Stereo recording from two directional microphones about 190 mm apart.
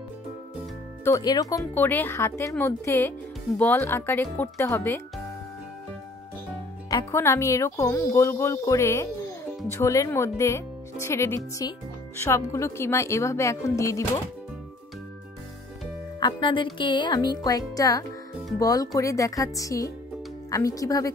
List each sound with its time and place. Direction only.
1.0 s speech: 20° left (ahead or behind)
6.9 s speech: 15° left (ahead or behind)
16.2 s speech: 25° left (ahead or behind)